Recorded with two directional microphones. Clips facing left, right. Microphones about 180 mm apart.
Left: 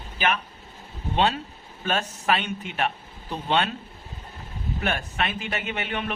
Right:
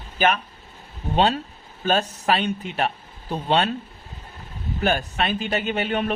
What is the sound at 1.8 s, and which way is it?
A man's voice, 35° right (ahead or behind).